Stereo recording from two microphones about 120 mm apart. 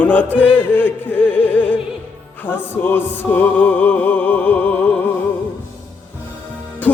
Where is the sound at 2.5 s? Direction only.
15° left (ahead or behind).